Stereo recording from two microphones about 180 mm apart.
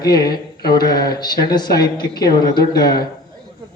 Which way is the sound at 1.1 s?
25° left (ahead or behind).